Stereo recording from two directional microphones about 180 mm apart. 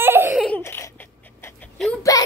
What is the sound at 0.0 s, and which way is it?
Laughter, 10° right (ahead or behind).